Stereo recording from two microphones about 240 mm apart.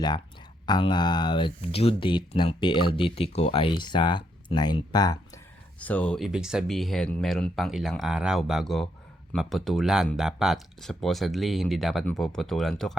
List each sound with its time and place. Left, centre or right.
0.6 s speech: centre
5.8 s speech: centre